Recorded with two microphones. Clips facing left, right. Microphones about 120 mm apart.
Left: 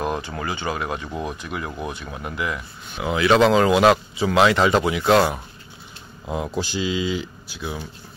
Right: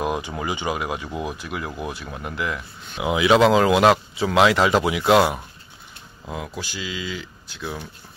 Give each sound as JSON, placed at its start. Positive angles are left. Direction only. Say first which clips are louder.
{"t": 0.0, "sound": "speech", "louder": "right 1 dB", "side_deg": -10}
{"t": 3.0, "sound": "speech", "louder": "even", "side_deg": -10}
{"t": 6.2, "sound": "speech", "louder": "left 6 dB", "side_deg": 25}
{"t": 7.4, "sound": "speech", "louder": "left 1 dB", "side_deg": 5}